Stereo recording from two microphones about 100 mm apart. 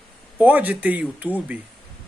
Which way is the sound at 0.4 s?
15° right (ahead or behind).